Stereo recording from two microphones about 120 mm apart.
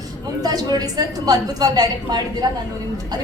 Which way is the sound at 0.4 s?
35° right (ahead or behind).